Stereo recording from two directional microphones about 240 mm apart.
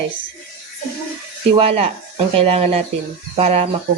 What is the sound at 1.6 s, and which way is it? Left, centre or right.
A woman's voice, right.